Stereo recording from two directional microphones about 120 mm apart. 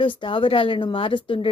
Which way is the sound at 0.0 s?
45° left (ahead or behind).